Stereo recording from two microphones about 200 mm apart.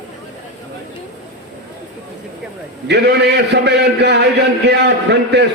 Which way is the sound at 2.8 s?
55° right (ahead or behind).